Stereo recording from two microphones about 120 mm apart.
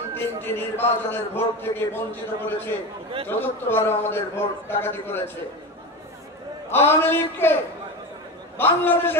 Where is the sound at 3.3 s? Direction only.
20° left (ahead or behind).